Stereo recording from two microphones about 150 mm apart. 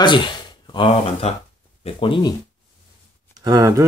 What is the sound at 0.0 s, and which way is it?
Speech, 30° left (ahead or behind).